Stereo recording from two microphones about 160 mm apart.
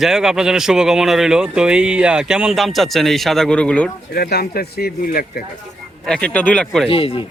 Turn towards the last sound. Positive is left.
turn(degrees=35)  # may be behind; listen again after turning